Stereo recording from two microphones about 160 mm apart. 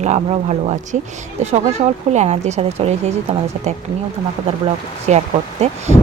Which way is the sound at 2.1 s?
45° right (ahead or behind).